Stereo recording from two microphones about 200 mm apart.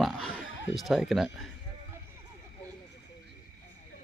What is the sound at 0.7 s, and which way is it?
Speech, centre (ahead or behind).